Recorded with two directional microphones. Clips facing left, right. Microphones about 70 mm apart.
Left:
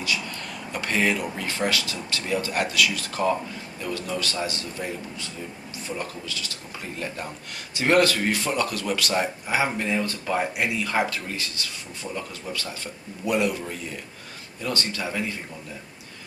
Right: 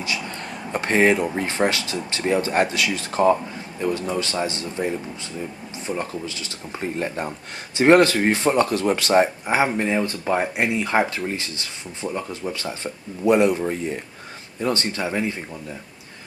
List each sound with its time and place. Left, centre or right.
0.0 s speech: right